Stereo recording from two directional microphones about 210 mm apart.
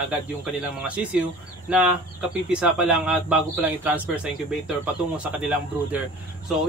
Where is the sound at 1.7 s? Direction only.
5° right (ahead or behind).